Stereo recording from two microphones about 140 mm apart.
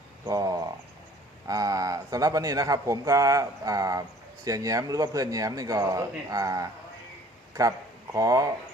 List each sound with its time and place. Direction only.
0.3 s frog: 25° right (ahead or behind)
1.5 s speech: 25° right (ahead or behind)
8.1 s speech: 25° right (ahead or behind)